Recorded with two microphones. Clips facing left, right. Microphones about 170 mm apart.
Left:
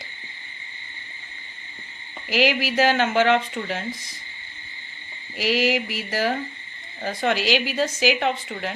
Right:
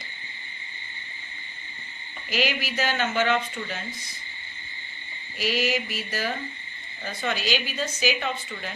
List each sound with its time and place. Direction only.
2.3 s speech: 90° left
3.2 s speech: 70° left (ahead or behind)
5.4 s a woman's voice: 90° left; by 8.7 s 75° left (ahead or behind)